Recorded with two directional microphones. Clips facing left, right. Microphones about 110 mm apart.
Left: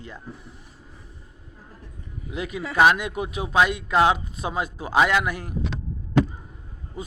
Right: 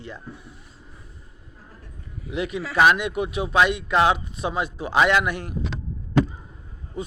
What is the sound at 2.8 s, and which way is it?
A man's voice, 35° left (ahead or behind).